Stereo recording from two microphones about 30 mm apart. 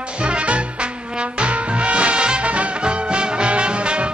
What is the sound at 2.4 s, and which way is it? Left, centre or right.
Music, right.